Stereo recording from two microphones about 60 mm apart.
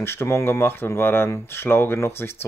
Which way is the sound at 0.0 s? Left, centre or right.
Left.